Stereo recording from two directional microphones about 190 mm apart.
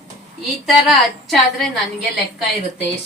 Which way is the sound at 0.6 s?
Centre (ahead or behind).